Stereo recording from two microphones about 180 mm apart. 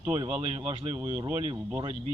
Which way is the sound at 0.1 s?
25° right (ahead or behind).